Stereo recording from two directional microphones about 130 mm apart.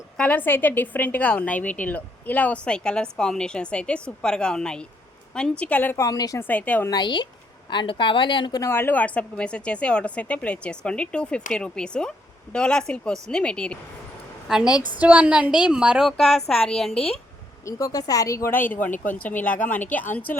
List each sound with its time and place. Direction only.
0.2 s a woman's voice: 15° left (ahead or behind)
6.1 s speech: 25° left (ahead or behind)
6.4 s a woman's voice: 10° left (ahead or behind)
6.9 s a woman's voice: 35° left (ahead or behind)
8.6 s a woman's voice: 15° left (ahead or behind)
14.4 s a woman's voice: 5° right (ahead or behind)
17.7 s a woman's voice: 25° left (ahead or behind)